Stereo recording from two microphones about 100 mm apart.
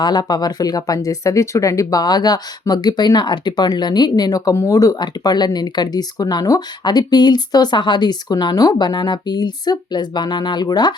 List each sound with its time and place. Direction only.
0.0 s speech: 45° left (ahead or behind)